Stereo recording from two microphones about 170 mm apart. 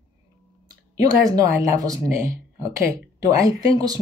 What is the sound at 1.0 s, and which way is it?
Speech, 20° right (ahead or behind).